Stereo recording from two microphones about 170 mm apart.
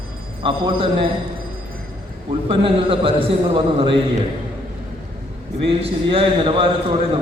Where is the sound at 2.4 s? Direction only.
30° right (ahead or behind).